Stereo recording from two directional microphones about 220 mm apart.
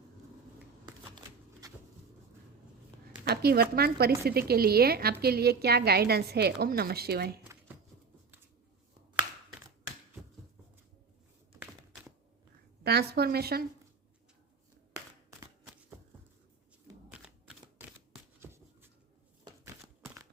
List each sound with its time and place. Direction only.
0.9 s shuffling cards: 20° right (ahead or behind)
3.2 s a woman's voice: 45° right (ahead or behind)
12.8 s a woman's voice: 45° right (ahead or behind)
17.7 s a sound: 10° right (ahead or behind)